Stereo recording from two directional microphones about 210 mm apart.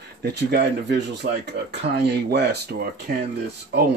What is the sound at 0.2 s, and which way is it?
Speech, 50° right (ahead or behind).